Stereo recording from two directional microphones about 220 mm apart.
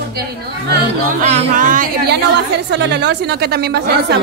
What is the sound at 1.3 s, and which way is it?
A woman's voice, 35° right (ahead or behind).